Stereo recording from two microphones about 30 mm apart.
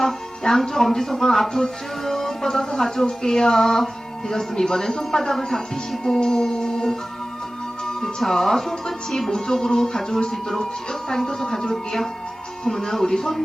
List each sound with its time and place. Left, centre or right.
0.4 s speech: centre
3.1 s speech: left
6.2 s music: centre
8.2 s speech: centre
12.6 s speech: centre